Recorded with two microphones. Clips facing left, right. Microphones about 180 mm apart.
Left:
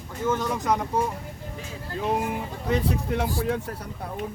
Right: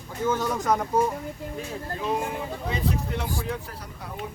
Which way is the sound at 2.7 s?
60° left (ahead or behind).